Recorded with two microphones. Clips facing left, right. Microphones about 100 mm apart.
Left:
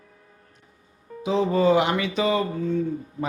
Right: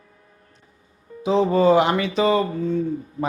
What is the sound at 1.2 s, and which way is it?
Speech, 35° right (ahead or behind).